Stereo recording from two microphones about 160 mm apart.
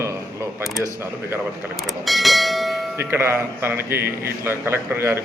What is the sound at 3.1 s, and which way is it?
A man's voice, 15° right (ahead or behind).